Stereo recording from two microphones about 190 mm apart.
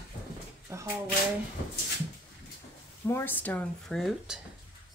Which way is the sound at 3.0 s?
10° left (ahead or behind).